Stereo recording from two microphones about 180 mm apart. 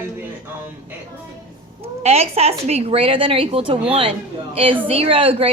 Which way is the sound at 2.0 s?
35° right (ahead or behind).